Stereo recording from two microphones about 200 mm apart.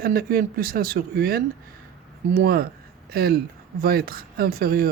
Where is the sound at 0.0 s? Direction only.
50° right (ahead or behind).